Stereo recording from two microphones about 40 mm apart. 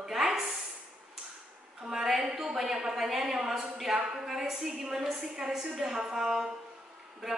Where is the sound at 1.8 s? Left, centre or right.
Centre.